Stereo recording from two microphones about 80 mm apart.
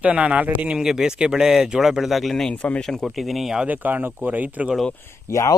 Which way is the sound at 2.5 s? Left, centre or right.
Centre.